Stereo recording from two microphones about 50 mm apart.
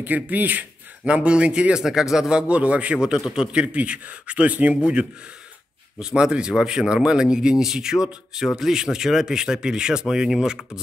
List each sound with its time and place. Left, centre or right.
0.0 s speech: right
1.0 s a man's voice: right
5.9 s speech: centre